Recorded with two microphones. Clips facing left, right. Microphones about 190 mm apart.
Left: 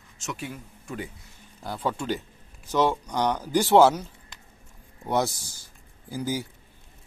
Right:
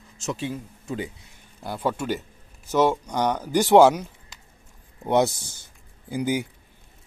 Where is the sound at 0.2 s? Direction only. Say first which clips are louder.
Right 6 dB; 30° right (ahead or behind).